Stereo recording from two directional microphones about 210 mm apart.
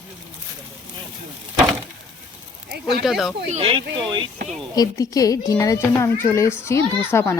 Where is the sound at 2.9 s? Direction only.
Centre (ahead or behind).